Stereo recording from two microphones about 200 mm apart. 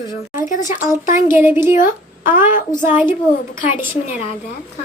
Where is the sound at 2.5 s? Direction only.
40° left (ahead or behind).